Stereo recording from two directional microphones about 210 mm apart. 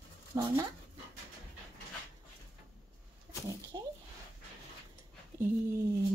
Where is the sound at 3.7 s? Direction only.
20° right (ahead or behind).